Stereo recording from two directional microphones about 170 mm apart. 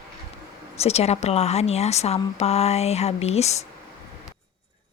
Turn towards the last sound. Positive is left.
turn(degrees=40)  # may be behind; listen again after turning